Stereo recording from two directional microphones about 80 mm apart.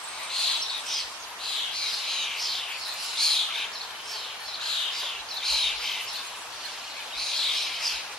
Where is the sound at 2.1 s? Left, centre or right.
Centre.